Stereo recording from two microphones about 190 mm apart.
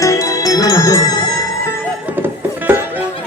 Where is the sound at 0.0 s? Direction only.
15° left (ahead or behind).